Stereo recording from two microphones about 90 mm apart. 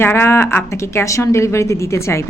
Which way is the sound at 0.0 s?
25° left (ahead or behind).